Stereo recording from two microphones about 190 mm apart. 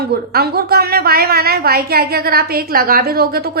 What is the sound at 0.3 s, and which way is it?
A woman's voice, 55° right (ahead or behind).